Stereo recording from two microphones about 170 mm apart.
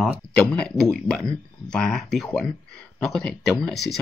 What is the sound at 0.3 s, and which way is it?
Speech, 5° left (ahead or behind).